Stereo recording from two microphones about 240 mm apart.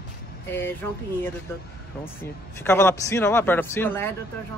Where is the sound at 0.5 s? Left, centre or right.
Centre.